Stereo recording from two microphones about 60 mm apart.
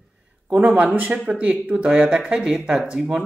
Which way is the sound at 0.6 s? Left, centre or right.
Centre.